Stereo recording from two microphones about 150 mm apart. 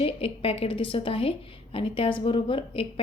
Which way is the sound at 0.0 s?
40° left (ahead or behind).